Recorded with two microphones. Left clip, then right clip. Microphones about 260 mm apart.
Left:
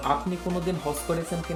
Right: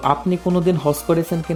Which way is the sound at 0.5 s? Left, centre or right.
Right.